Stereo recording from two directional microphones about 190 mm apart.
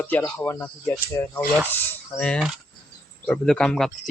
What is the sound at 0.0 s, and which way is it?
Speech, 10° left (ahead or behind).